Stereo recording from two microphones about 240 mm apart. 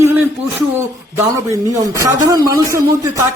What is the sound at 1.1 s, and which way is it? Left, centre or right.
A man's voice, centre.